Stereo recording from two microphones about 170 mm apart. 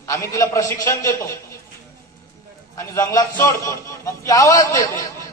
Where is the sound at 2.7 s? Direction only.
20° left (ahead or behind).